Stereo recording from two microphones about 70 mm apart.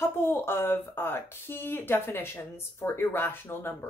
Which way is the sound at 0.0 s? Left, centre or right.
Left.